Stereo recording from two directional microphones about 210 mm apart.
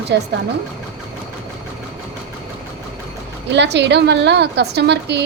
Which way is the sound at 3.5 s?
55° right (ahead or behind).